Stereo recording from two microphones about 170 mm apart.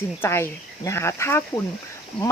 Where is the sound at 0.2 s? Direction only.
15° left (ahead or behind).